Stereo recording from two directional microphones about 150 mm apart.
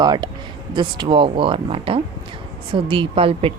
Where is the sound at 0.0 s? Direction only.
30° right (ahead or behind).